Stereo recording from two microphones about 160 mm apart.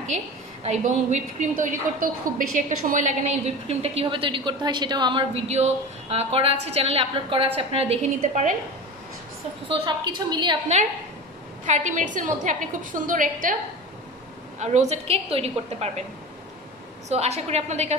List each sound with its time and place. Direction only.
0.7 s a woman's voice: 45° right (ahead or behind)
9.7 s a woman's voice: 30° right (ahead or behind)
11.6 s a woman's voice: 50° right (ahead or behind)
14.6 s a woman's voice: 45° right (ahead or behind)
17.1 s a woman's voice: 40° right (ahead or behind)